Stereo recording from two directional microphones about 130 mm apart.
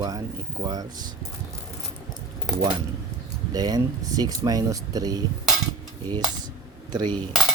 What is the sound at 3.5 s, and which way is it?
Speech, 30° right (ahead or behind).